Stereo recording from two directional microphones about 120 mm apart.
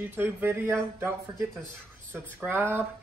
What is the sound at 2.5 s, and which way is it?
Speech, 20° right (ahead or behind).